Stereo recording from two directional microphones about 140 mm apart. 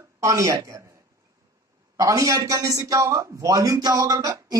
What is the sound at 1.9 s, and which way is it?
Speech, 25° right (ahead or behind).